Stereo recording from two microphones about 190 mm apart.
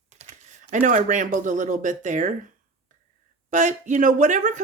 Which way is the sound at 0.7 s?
40° right (ahead or behind).